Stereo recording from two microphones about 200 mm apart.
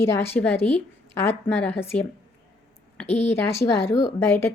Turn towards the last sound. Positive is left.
turn(degrees=10)  # may be behind; listen again after turning